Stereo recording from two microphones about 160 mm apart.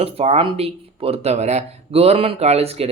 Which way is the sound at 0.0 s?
40° right (ahead or behind).